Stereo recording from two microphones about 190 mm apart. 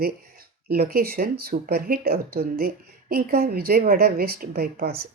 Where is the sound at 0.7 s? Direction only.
50° right (ahead or behind).